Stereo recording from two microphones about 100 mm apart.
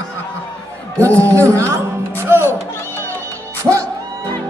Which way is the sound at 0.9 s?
25° right (ahead or behind).